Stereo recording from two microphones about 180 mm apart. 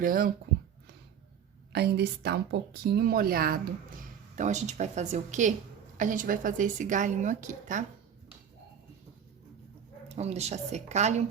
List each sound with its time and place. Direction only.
0.0 s a woman's voice: 50° right (ahead or behind)
1.7 s speech: 65° right (ahead or behind)
4.4 s a woman's voice: 40° right (ahead or behind)
10.1 s a woman's voice: 35° right (ahead or behind)